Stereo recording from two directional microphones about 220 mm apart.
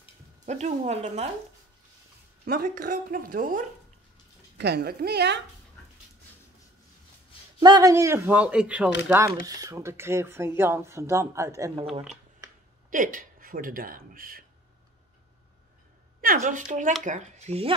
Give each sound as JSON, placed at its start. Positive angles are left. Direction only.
{"t": 0.5, "sound": "speech", "side_deg": -30}
{"t": 2.4, "sound": "a woman's voice", "side_deg": -40}
{"t": 7.6, "sound": "speech", "side_deg": -15}
{"t": 12.9, "sound": "speech", "side_deg": -35}
{"t": 16.2, "sound": "speech", "side_deg": -40}